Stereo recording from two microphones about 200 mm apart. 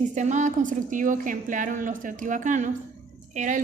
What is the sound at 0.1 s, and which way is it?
A woman's voice, 35° right (ahead or behind).